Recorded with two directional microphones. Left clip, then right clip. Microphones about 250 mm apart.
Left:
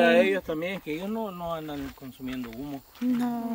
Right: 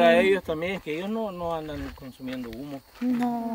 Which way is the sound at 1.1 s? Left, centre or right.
Centre.